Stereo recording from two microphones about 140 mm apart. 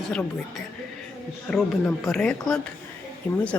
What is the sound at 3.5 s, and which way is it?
Speech, 20° left (ahead or behind).